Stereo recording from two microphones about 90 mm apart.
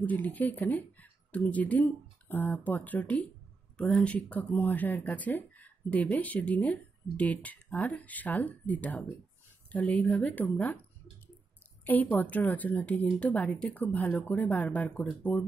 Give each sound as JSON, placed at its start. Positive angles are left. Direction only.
{"t": 0.0, "sound": "speech", "side_deg": 20}
{"t": 11.8, "sound": "speech", "side_deg": 20}